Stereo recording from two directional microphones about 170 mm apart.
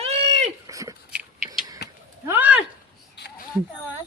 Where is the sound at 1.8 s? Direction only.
75° left (ahead or behind).